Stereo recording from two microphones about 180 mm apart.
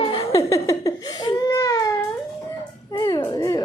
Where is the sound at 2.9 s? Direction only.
20° left (ahead or behind).